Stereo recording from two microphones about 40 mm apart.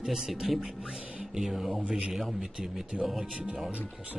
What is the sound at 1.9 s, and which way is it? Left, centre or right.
Speech, centre.